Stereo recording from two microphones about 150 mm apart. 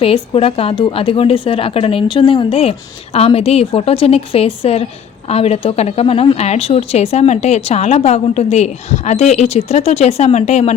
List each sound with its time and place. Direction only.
0.0 s a woman's voice: 40° left (ahead or behind)